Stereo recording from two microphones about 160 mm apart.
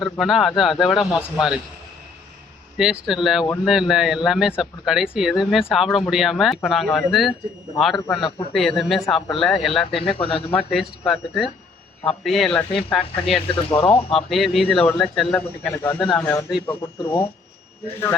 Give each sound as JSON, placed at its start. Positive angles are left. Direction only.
{"t": 0.0, "sound": "speech", "side_deg": 0}
{"t": 2.7, "sound": "speech", "side_deg": -5}
{"t": 10.2, "sound": "speech", "side_deg": 35}
{"t": 10.5, "sound": "speech", "side_deg": 0}
{"t": 13.7, "sound": "speech", "side_deg": 35}
{"t": 14.1, "sound": "speech", "side_deg": 0}